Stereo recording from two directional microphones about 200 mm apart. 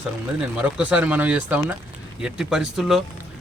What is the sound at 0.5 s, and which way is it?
A man's voice, 5° right (ahead or behind).